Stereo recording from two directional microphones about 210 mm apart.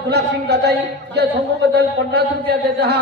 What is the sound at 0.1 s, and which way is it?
Speech, 50° right (ahead or behind).